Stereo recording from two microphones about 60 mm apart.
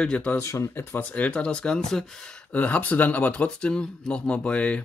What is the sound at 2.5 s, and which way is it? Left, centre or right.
Speech, left.